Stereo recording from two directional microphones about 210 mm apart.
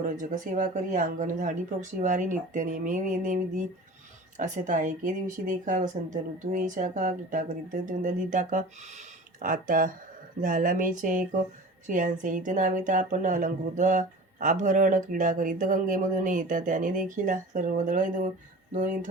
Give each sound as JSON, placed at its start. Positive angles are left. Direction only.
{"t": 0.0, "sound": "speech", "side_deg": -35}
{"t": 4.4, "sound": "speech", "side_deg": -35}